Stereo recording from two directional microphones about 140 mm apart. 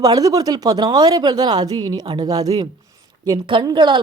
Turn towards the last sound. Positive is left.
turn(degrees=-30)  # may be behind; listen again after turning